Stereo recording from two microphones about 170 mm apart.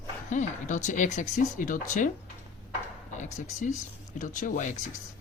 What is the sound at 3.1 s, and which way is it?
Speech, 45° left (ahead or behind).